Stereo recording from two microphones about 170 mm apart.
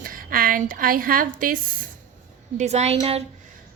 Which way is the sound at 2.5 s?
40° right (ahead or behind).